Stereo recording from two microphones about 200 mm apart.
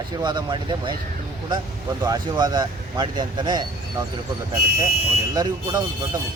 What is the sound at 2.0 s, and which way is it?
Speech, 20° right (ahead or behind).